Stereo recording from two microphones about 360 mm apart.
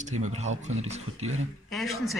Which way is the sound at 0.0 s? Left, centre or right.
Centre.